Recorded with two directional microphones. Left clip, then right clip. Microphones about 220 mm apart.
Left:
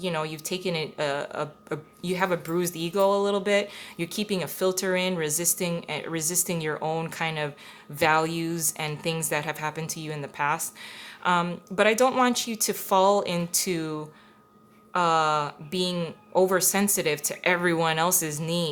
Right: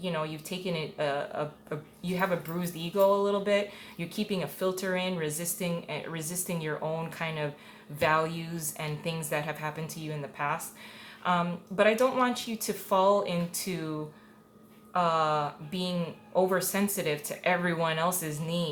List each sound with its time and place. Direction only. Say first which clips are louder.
0.0 s speech: left 4 dB; 45° left (ahead or behind)
14.9 s speech: left 4 dB; 45° left (ahead or behind)